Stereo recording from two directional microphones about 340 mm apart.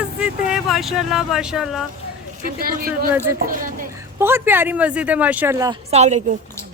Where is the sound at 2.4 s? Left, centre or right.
Right.